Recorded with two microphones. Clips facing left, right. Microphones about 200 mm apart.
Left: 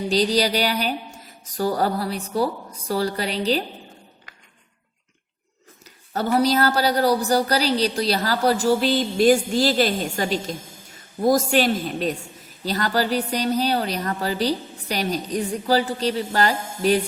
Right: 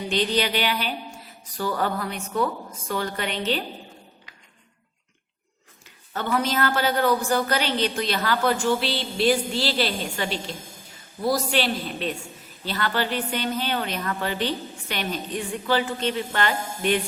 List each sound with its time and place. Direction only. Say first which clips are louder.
0.1 s a woman's voice: left 4 dB; 35° left (ahead or behind)
6.1 s a woman's voice: left 5 dB; 40° left (ahead or behind)